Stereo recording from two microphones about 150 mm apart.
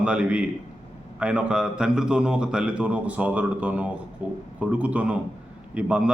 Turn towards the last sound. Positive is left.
turn(degrees=-5)  # may be behind; listen again after turning